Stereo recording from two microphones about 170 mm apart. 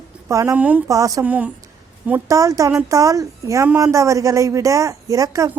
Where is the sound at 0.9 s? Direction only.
20° right (ahead or behind).